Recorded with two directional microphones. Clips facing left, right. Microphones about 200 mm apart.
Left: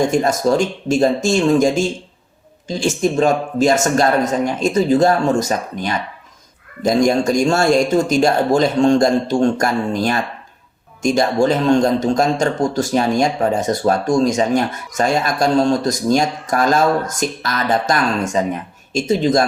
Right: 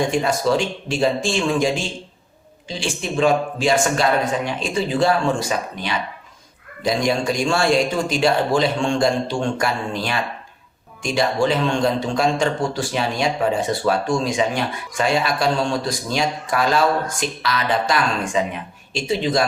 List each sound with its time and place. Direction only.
0.1 s speech: 45° left (ahead or behind)